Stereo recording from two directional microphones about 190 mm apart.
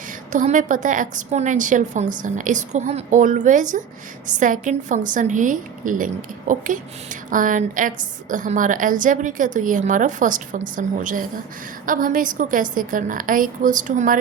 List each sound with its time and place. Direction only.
0.3 s a woman's voice: 40° right (ahead or behind)